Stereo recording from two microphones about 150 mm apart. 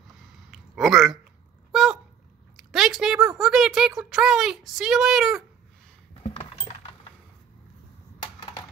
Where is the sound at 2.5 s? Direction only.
Centre (ahead or behind).